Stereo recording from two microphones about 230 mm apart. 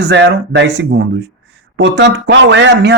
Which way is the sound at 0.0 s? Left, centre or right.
Right.